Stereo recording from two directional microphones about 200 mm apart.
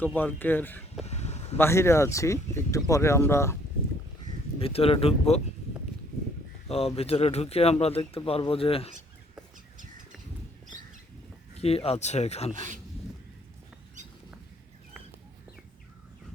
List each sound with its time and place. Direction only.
0.0 s speech: 10° left (ahead or behind)
1.0 s a sound: 35° left (ahead or behind)
1.5 s speech: 10° left (ahead or behind)
4.6 s speech: 30° left (ahead or behind)
6.7 s speech: 30° left (ahead or behind)
11.5 s speech: 30° left (ahead or behind)